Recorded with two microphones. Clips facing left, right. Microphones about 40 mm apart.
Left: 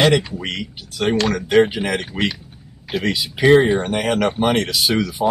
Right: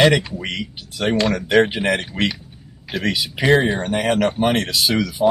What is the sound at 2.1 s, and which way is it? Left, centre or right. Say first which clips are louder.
Speech: even; centre.